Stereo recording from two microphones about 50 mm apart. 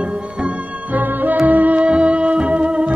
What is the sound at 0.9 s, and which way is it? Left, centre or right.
Music, right.